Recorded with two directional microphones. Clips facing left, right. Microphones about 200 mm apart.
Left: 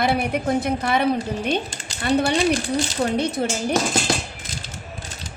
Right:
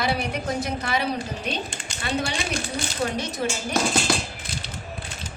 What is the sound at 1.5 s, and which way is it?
Speech, 45° left (ahead or behind).